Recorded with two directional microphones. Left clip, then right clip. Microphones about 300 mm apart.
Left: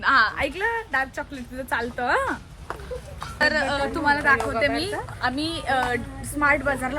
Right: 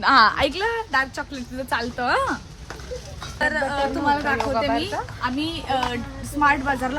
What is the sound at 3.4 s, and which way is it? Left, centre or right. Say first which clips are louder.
Speech: left 1 dB; centre.